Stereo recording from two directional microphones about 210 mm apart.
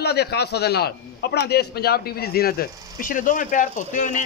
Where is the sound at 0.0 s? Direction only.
50° left (ahead or behind).